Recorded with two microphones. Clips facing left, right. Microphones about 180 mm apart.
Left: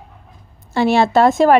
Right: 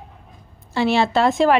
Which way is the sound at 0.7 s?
50° left (ahead or behind).